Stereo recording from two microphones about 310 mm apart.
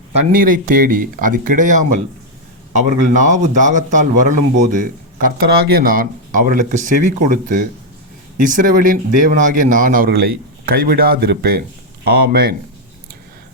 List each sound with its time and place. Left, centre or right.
0.1 s speech: right